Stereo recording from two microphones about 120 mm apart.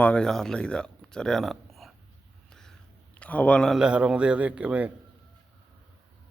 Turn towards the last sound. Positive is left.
turn(degrees=-10)  # may be behind; listen again after turning